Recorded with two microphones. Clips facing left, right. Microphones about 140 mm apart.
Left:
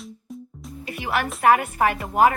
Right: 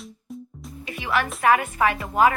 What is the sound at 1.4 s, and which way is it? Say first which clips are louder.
Speech: left 2 dB; 50° left (ahead or behind).